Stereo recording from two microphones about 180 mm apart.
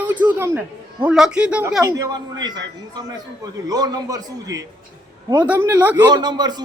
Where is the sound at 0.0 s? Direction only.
10° right (ahead or behind).